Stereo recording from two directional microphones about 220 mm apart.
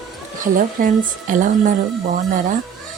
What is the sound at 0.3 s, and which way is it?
Speech, 35° right (ahead or behind).